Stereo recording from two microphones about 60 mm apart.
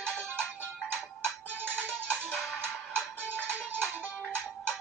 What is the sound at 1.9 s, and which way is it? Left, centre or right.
Music, left.